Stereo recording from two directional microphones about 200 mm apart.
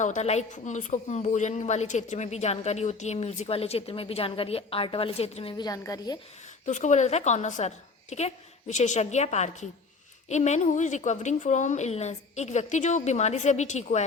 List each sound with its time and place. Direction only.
0.0 s speech: 35° left (ahead or behind); by 6.1 s 15° left (ahead or behind)
6.7 s speech: 35° left (ahead or behind)